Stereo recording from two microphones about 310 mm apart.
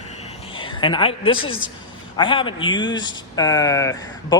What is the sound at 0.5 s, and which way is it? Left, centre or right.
Speech, centre.